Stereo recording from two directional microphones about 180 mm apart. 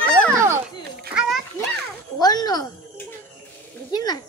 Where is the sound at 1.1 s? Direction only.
5° right (ahead or behind).